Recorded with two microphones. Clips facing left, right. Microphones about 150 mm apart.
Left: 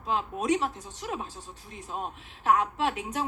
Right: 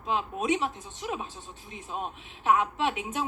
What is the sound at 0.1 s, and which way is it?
Speech, 15° right (ahead or behind).